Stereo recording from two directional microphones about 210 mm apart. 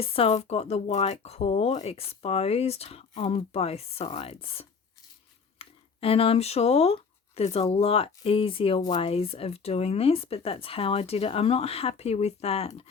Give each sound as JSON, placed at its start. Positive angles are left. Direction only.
{"t": 0.0, "sound": "speech", "side_deg": 30}